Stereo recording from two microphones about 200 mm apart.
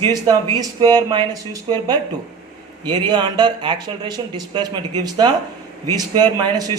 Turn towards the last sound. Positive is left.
turn(degrees=-20)  # may be behind; listen again after turning